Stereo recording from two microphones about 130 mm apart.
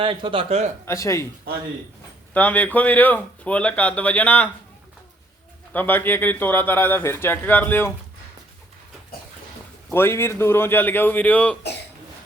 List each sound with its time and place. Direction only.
0.0 s speech: 40° right (ahead or behind)
0.9 s speech: 20° left (ahead or behind)
2.3 s speech: 10° left (ahead or behind)
5.7 s speech: 15° left (ahead or behind)
9.9 s speech: 20° left (ahead or behind)